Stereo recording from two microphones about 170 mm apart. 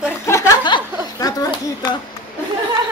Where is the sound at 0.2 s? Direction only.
15° left (ahead or behind).